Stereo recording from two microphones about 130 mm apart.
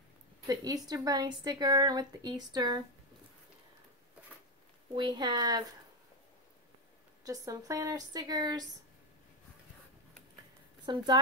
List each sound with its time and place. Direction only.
0.5 s a woman's voice: 30° right (ahead or behind)
4.9 s a woman's voice: 35° right (ahead or behind)
7.2 s a woman's voice: 25° right (ahead or behind)
10.9 s a woman's voice: 35° right (ahead or behind)